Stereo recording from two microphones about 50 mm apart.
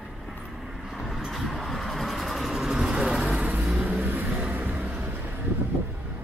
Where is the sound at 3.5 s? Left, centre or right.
Right.